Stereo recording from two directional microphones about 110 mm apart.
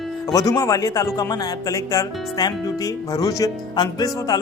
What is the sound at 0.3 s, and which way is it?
Speech, 35° left (ahead or behind).